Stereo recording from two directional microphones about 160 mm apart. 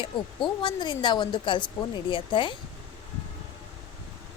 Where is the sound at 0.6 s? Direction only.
30° left (ahead or behind).